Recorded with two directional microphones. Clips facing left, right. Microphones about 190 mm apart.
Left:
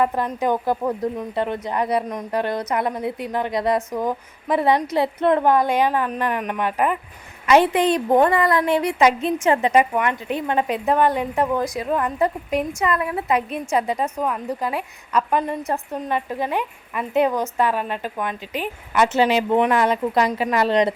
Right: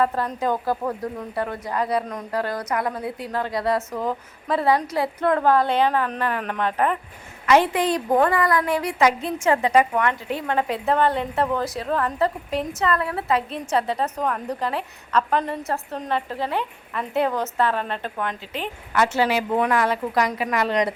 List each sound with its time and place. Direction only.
0.0 s a woman's voice: 15° left (ahead or behind)
7.4 s a woman's voice: 20° left (ahead or behind)